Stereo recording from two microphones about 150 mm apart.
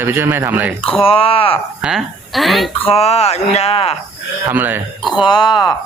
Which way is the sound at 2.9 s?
40° left (ahead or behind).